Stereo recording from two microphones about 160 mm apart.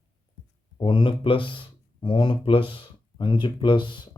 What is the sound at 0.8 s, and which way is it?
Speech, 30° left (ahead or behind).